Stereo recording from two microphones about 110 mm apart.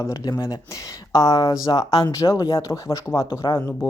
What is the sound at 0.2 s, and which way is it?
Speech, 35° left (ahead or behind).